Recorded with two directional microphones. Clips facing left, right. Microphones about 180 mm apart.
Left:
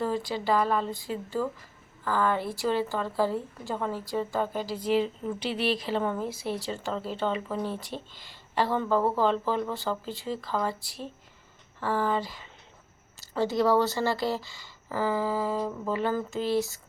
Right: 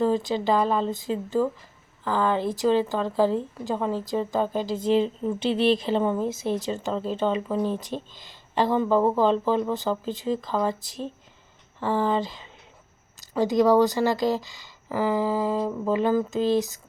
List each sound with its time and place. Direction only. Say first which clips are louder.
0.0 s a woman's voice: right 6 dB; 20° right (ahead or behind)